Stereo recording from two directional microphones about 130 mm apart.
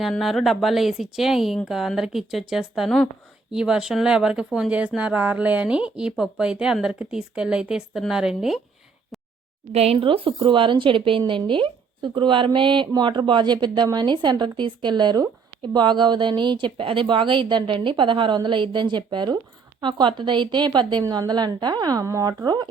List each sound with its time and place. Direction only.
0.0 s speech: centre (ahead or behind)
9.7 s a woman's voice: 50° right (ahead or behind); by 22.7 s 30° right (ahead or behind)